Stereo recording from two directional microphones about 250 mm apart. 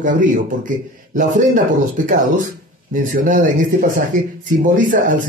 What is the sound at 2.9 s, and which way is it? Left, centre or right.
Speech, right.